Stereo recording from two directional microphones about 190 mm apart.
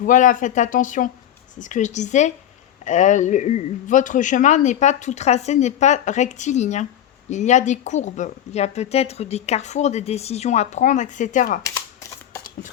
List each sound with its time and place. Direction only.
0.0 s speech: 45° left (ahead or behind)